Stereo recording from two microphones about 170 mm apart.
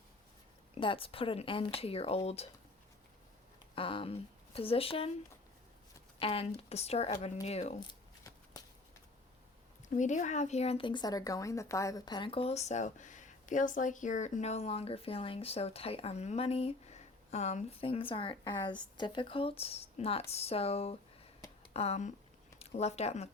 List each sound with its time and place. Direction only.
0.8 s speech: 30° left (ahead or behind)
3.8 s speech: 30° left (ahead or behind)
6.1 s speech: 35° left (ahead or behind)
7.8 s shuffling cards: 25° left (ahead or behind)
9.9 s speech: 45° left (ahead or behind)